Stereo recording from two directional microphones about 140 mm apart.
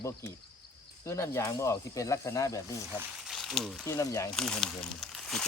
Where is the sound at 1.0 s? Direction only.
20° left (ahead or behind).